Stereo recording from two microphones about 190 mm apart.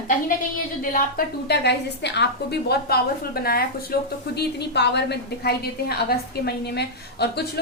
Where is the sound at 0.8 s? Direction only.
50° left (ahead or behind).